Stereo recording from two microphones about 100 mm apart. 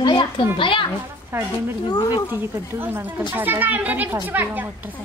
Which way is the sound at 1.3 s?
25° right (ahead or behind).